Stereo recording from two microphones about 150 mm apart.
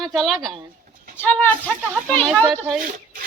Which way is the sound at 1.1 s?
10° left (ahead or behind).